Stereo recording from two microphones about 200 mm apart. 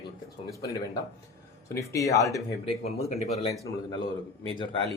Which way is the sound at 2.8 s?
30° left (ahead or behind).